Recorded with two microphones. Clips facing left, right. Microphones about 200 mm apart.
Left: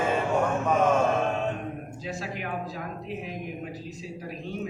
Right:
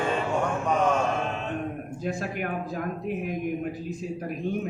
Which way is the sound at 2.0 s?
50° right (ahead or behind).